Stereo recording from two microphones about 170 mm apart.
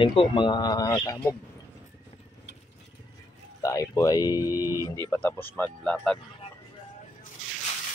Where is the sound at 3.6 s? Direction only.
20° left (ahead or behind).